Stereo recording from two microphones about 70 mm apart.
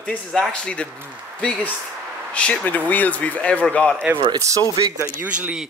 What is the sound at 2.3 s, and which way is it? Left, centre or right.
Speech, centre.